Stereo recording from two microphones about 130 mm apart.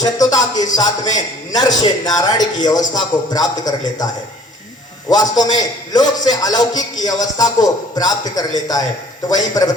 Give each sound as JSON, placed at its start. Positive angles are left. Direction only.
{"t": 0.0, "sound": "a man's voice", "side_deg": 30}